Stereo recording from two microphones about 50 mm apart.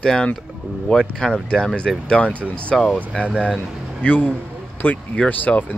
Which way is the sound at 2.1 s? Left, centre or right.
Left.